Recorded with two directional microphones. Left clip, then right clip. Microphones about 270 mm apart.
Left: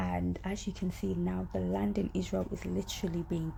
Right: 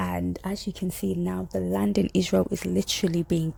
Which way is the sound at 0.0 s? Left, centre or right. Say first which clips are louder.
Right 6 dB; right.